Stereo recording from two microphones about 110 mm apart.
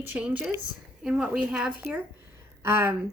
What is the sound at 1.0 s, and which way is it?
Speech, 10° right (ahead or behind).